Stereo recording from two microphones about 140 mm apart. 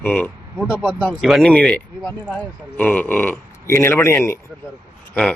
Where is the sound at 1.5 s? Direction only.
10° left (ahead or behind).